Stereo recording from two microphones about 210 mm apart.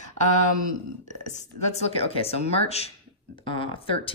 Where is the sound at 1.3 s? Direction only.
30° left (ahead or behind).